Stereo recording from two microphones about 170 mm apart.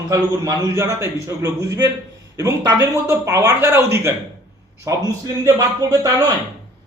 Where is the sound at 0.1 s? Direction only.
20° right (ahead or behind).